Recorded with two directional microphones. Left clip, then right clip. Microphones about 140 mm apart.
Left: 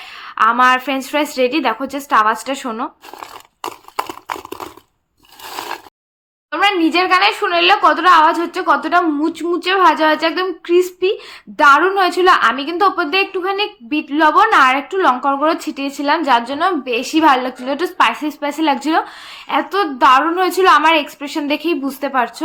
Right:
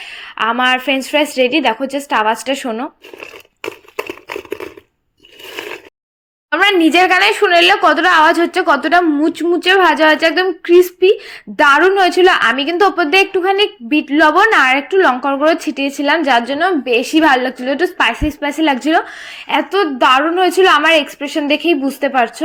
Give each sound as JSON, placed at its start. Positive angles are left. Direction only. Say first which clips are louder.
{"t": 0.0, "sound": "a woman's voice", "louder": "left 3 dB", "side_deg": -15}
{"t": 6.5, "sound": "a woman's voice", "louder": "right 3 dB", "side_deg": -50}